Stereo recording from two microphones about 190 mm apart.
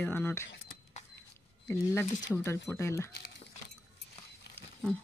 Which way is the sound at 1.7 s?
10° left (ahead or behind).